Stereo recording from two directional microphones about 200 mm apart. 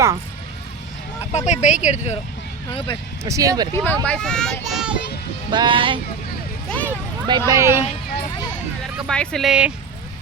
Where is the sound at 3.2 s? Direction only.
15° right (ahead or behind).